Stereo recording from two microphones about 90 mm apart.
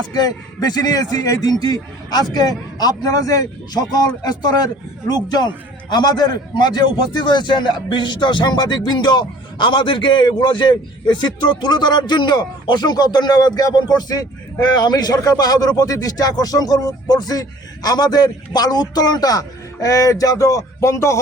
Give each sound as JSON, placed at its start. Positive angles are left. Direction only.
{"t": 0.1, "sound": "a man's voice", "side_deg": 45}